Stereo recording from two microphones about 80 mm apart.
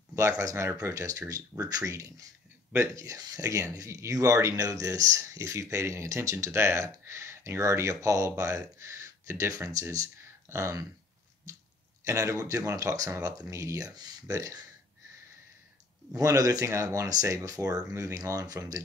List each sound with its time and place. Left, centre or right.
0.1 s speech: right
11.5 s a sound: right
12.0 s speech: right
16.2 s speech: right